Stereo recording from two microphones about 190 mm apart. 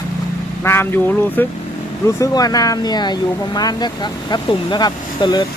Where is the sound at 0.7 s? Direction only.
10° left (ahead or behind).